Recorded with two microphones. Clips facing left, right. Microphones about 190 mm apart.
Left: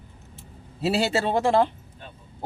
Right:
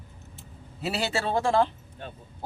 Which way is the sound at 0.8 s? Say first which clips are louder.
Left 5 dB; 30° left (ahead or behind).